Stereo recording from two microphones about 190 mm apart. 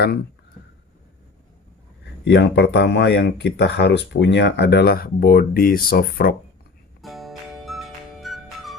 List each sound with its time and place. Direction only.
2.2 s speech: 65° left (ahead or behind)
7.0 s music: centre (ahead or behind)